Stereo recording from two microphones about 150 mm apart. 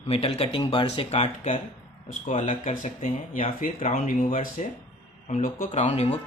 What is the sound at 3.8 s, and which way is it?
Speech, 55° left (ahead or behind).